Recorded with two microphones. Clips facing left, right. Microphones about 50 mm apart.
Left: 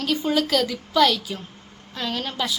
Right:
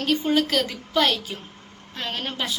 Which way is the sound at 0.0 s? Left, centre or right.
Right.